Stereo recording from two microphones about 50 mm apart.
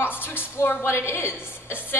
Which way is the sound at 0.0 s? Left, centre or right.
Left.